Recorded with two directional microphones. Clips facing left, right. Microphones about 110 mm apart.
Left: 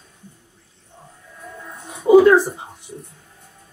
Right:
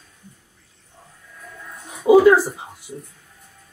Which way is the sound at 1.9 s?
5° right (ahead or behind).